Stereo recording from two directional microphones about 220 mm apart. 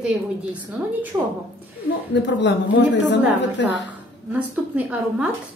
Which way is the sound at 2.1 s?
55° left (ahead or behind).